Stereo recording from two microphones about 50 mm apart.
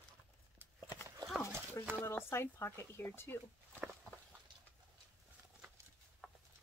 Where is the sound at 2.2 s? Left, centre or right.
Left.